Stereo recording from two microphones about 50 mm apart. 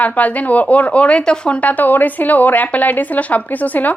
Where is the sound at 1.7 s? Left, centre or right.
Left.